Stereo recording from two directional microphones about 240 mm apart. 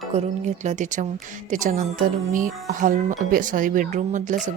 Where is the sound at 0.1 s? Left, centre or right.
Right.